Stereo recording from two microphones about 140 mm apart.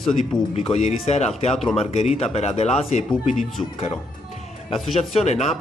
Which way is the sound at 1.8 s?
50° left (ahead or behind).